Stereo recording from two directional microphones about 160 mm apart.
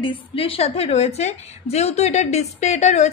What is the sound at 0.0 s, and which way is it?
A woman's voice, 35° left (ahead or behind).